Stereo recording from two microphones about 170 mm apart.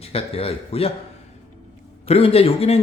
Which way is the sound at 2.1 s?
35° left (ahead or behind).